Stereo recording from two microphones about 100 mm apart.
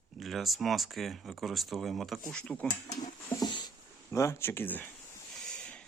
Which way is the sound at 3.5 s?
45° left (ahead or behind).